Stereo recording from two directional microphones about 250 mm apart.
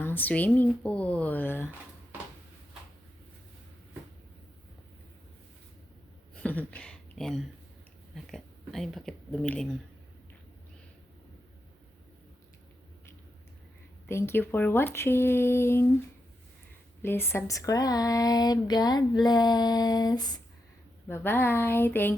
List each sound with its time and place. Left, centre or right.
0.0 s speech: centre
6.3 s a sound: centre
8.1 s speech: centre
14.1 s speech: centre
17.0 s speech: centre